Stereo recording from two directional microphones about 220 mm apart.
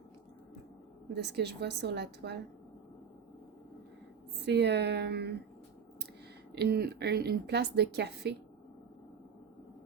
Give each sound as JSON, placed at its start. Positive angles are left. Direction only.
{"t": 1.1, "sound": "a woman's voice", "side_deg": -50}
{"t": 4.4, "sound": "a woman's voice", "side_deg": -50}
{"t": 6.5, "sound": "a woman's voice", "side_deg": -45}